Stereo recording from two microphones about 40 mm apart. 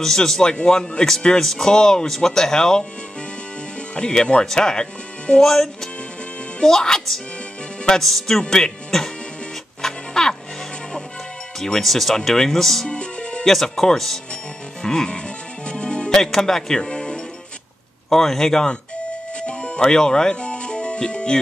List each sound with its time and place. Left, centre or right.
0.0 s speech: centre
3.9 s speech: left
5.4 s speech: centre
9.8 s music: centre
11.8 s speech: centre
12.9 s music: left
13.5 s speech: centre
14.3 s music: centre
16.1 s speech: centre
18.1 s speech: centre
19.3 s music: left
19.8 s music: centre